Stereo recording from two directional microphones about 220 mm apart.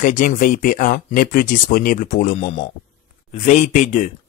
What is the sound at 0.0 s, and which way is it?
Speech, 35° left (ahead or behind).